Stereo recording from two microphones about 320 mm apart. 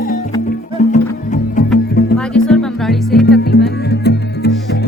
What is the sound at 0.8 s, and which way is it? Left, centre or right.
Music, left.